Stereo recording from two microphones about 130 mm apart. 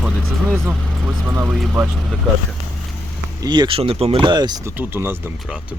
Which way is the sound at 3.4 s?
35° right (ahead or behind).